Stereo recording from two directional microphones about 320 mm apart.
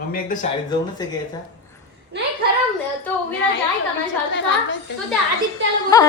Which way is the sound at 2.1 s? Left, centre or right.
Right.